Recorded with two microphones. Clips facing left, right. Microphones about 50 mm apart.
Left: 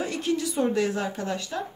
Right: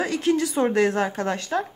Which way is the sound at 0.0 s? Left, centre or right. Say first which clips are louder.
Right 5 dB; right.